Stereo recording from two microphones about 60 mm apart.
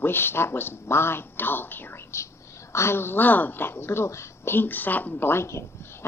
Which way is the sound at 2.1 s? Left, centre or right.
Left.